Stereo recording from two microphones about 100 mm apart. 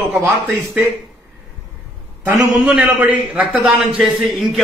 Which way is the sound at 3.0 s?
15° right (ahead or behind).